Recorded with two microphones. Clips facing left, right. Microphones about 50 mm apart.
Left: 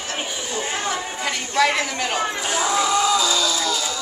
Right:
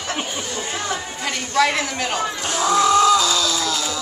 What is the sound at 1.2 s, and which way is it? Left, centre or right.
Speech, centre.